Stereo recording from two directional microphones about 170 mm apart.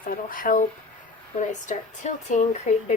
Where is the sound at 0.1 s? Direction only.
55° left (ahead or behind).